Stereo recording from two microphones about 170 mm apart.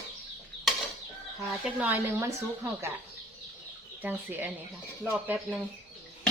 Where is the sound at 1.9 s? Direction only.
15° right (ahead or behind).